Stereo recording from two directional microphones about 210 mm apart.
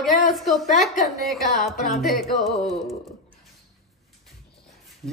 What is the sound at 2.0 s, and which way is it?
Speech, centre (ahead or behind).